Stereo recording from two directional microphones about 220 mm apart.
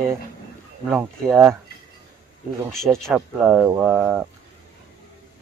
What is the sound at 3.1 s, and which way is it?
Speech, 10° right (ahead or behind).